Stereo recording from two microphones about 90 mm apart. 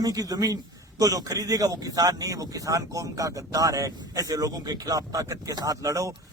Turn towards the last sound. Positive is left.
turn(degrees=-35)  # may be behind; listen again after turning